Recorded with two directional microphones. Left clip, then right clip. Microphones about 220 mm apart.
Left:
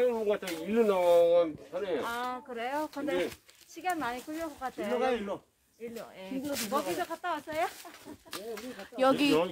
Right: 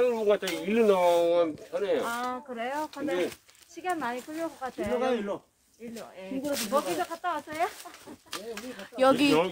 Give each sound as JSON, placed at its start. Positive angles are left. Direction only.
{"t": 0.1, "sound": "speech", "side_deg": -35}
{"t": 2.0, "sound": "speech", "side_deg": 45}
{"t": 5.0, "sound": "speech", "side_deg": 20}
{"t": 6.4, "sound": "speech", "side_deg": -10}
{"t": 6.7, "sound": "speech", "side_deg": 45}
{"t": 8.3, "sound": "speech", "side_deg": -5}